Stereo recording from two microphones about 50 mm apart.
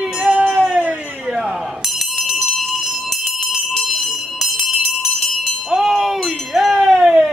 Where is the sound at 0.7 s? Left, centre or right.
Right.